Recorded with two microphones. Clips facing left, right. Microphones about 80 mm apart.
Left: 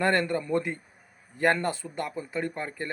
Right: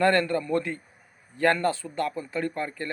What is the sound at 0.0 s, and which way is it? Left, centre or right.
Speech, centre.